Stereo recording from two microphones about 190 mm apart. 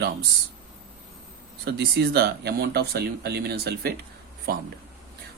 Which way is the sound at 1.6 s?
55° right (ahead or behind).